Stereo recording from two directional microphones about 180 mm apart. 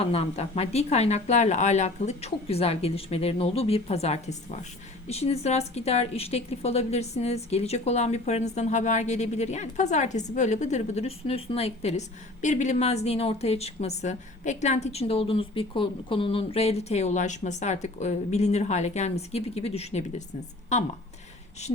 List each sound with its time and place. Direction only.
0.0 s a woman's voice: 35° left (ahead or behind)